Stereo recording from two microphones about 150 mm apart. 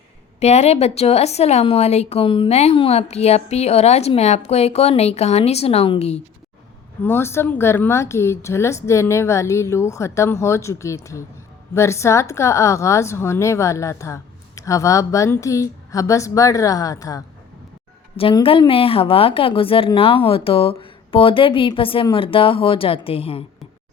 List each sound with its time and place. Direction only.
0.3 s speech: 45° left (ahead or behind)
7.0 s a woman's voice: 15° left (ahead or behind)
18.3 s a woman's voice: 35° left (ahead or behind)